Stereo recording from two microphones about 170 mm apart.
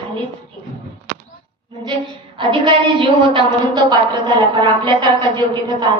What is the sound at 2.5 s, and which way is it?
A woman's voice, 30° right (ahead or behind).